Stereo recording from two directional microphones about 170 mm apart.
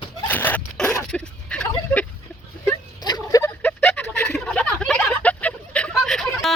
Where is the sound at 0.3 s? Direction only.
10° left (ahead or behind).